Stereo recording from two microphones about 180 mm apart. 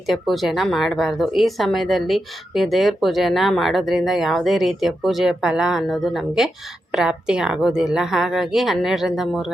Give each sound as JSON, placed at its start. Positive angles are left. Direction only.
{"t": 0.1, "sound": "speech", "side_deg": 0}